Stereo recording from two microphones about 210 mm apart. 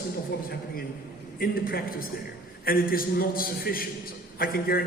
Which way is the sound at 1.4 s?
45° left (ahead or behind).